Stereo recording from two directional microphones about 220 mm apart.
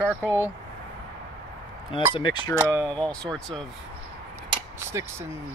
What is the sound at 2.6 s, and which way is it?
Speech, 10° right (ahead or behind).